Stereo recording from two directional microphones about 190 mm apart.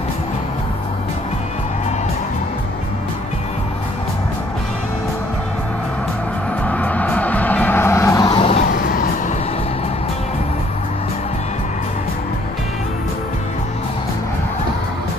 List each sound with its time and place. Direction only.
6.6 s music: 10° left (ahead or behind); by 8.6 s 30° left (ahead or behind)
8.7 s vehicle: 50° left (ahead or behind)